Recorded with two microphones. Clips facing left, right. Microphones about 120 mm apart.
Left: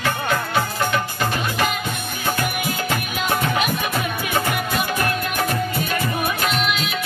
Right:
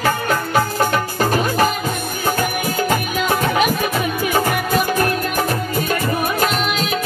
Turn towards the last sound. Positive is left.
turn(degrees=-40)  # may be behind; listen again after turning